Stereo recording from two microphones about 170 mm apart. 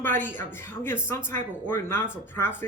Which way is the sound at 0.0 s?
10° left (ahead or behind).